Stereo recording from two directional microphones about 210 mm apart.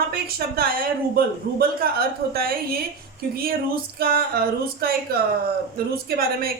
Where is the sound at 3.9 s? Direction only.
45° right (ahead or behind).